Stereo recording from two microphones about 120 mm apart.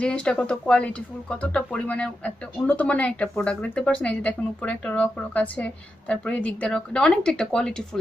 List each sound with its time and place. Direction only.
0.0 s speech: 10° left (ahead or behind)